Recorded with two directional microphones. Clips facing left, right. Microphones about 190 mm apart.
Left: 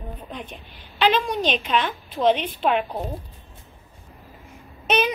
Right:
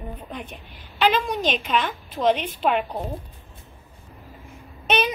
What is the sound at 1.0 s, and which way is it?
A woman's voice, 5° right (ahead or behind).